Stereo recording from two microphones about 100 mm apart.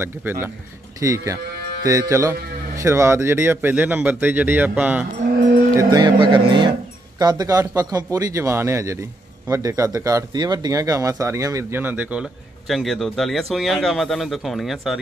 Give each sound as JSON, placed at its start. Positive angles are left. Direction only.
{"t": 0.0, "sound": "speech", "side_deg": -25}
{"t": 5.9, "sound": "speech", "side_deg": -45}
{"t": 7.2, "sound": "a man's voice", "side_deg": -40}
{"t": 11.7, "sound": "speech", "side_deg": -20}
{"t": 12.6, "sound": "speech", "side_deg": 0}